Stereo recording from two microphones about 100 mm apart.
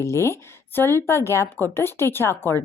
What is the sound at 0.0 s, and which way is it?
A woman's voice, 25° left (ahead or behind).